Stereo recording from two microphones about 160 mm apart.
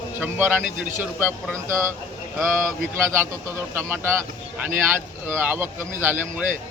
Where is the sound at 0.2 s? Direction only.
15° right (ahead or behind).